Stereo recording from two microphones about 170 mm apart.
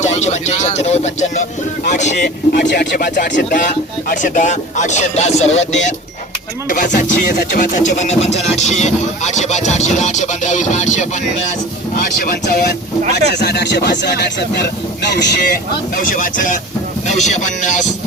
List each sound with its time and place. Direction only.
0.0 s speech: 40° left (ahead or behind)
2.0 s speech: 70° left (ahead or behind); by 11.1 s 45° left (ahead or behind)
11.9 s speech: 55° left (ahead or behind)
13.3 s speech: 75° left (ahead or behind); by 15.4 s 90° left
16.0 s speech: 55° left (ahead or behind)